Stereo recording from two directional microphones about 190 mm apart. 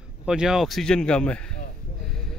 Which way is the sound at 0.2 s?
5° right (ahead or behind).